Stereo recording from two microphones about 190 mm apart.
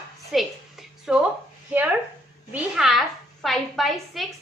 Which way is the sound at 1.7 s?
10° right (ahead or behind).